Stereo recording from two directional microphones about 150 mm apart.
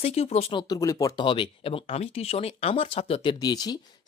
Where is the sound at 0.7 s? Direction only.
20° left (ahead or behind); by 3.3 s 40° left (ahead or behind).